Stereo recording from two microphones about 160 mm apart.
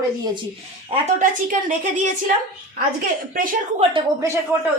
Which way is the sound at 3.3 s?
60° right (ahead or behind).